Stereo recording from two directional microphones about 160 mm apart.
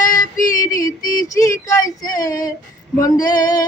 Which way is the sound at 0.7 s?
20° left (ahead or behind).